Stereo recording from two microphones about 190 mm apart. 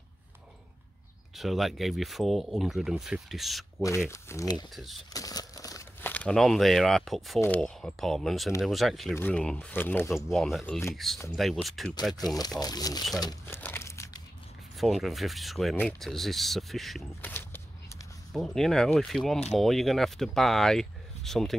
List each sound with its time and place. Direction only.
1.3 s speech: centre (ahead or behind)
4.1 s speech: 15° left (ahead or behind)
4.7 s speech: centre (ahead or behind)
5.1 s speech: 20° left (ahead or behind)
10.1 s speech: centre (ahead or behind)
12.4 s speech: 20° left (ahead or behind)
13.6 s crumpling: 10° left (ahead or behind)
14.8 s speech: centre (ahead or behind)
17.3 s a sound: 10° left (ahead or behind)
18.3 s speech: centre (ahead or behind)